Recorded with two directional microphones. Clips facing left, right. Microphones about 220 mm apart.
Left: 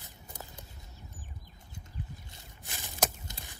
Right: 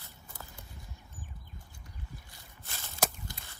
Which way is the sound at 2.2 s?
20° left (ahead or behind).